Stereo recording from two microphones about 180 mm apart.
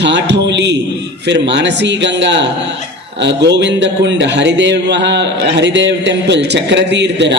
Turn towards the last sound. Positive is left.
turn(degrees=-75)  # may be behind; listen again after turning